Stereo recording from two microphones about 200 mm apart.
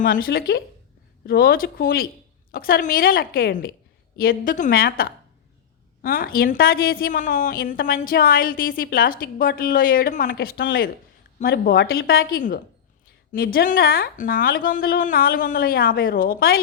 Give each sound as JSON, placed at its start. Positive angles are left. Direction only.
{"t": 0.0, "sound": "a woman's voice", "side_deg": 45}